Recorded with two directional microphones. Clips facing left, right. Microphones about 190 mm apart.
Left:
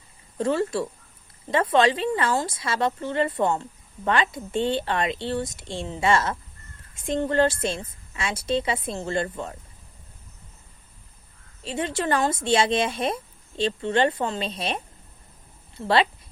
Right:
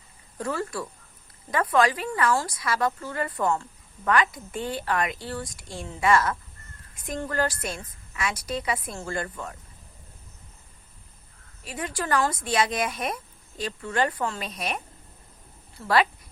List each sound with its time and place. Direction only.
0.3 s a woman's voice: 25° left (ahead or behind)
11.6 s a woman's voice: 25° left (ahead or behind)